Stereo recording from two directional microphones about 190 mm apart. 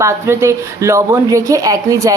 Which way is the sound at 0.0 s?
15° right (ahead or behind).